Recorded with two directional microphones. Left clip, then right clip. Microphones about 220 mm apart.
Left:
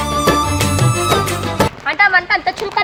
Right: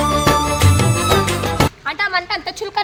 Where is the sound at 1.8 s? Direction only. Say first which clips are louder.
Left 7 dB; 50° right (ahead or behind).